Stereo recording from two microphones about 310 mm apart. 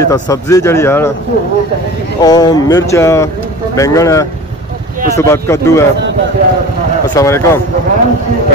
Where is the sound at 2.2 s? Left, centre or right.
Centre.